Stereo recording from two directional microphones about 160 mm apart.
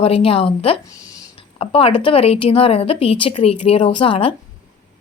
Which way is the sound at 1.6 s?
35° left (ahead or behind).